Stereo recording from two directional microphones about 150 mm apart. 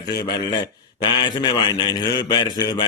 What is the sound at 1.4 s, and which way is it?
A man's voice, 25° left (ahead or behind).